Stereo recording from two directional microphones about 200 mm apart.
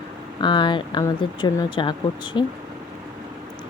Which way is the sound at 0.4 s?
25° left (ahead or behind).